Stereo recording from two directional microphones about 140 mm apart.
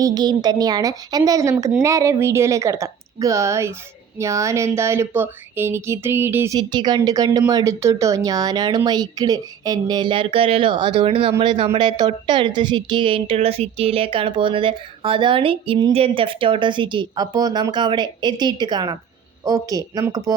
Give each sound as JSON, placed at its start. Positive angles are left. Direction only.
{"t": 0.0, "sound": "speech", "side_deg": -30}
{"t": 6.6, "sound": "a woman's voice", "side_deg": -30}